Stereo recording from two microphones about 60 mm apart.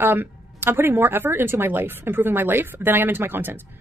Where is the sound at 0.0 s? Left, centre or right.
Right.